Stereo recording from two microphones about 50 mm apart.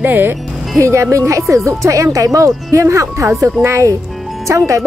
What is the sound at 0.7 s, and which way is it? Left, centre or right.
Speech, right.